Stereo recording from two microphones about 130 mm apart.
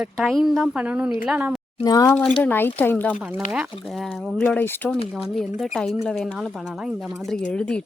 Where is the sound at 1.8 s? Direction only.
25° left (ahead or behind).